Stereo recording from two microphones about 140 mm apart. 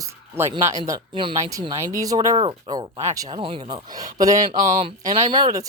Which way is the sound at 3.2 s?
40° right (ahead or behind).